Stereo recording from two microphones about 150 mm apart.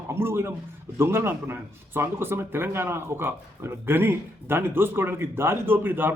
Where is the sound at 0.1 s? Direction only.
15° right (ahead or behind).